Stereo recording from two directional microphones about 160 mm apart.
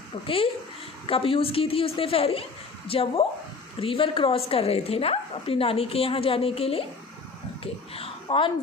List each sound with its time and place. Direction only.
0.3 s a woman's voice: 35° left (ahead or behind)